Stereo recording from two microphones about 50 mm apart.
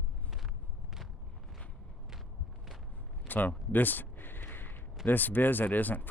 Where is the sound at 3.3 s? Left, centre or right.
Left.